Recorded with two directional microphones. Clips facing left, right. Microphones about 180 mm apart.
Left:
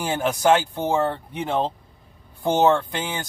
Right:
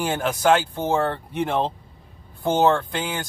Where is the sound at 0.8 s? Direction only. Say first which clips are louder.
Even; 10° left (ahead or behind).